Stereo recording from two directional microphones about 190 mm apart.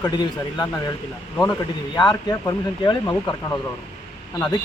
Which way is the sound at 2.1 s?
20° left (ahead or behind).